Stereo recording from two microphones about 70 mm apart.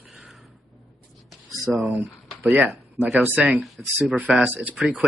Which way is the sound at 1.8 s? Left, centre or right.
Right.